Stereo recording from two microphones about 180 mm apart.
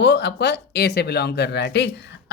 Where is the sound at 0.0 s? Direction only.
70° left (ahead or behind).